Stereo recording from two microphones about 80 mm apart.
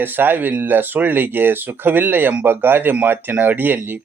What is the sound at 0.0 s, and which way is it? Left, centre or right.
Speech, right.